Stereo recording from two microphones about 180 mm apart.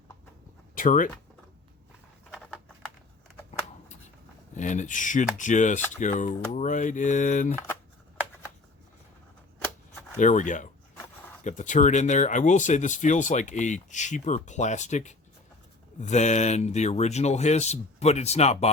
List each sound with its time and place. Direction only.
0.8 s speech: 50° left (ahead or behind)
4.5 s speech: 40° left (ahead or behind)
10.2 s speech: 45° left (ahead or behind)